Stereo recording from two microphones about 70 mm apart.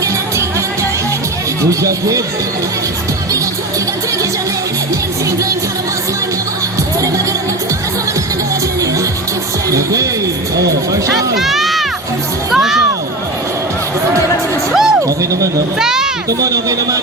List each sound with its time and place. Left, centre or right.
1.8 s speech: right
9.6 s speech: right
11.3 s music: centre
12.5 s speech: centre
14.7 s music: centre
15.0 s speech: right
15.8 s speech: centre
16.4 s speech: right